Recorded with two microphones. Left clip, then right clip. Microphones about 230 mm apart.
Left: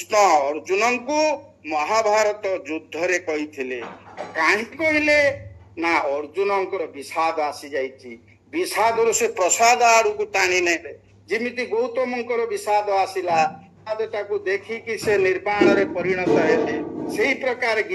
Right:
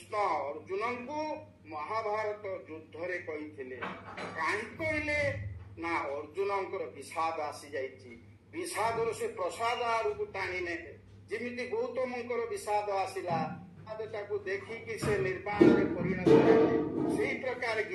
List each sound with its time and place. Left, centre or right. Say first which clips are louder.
0.1 s a man's voice: left 15 dB; left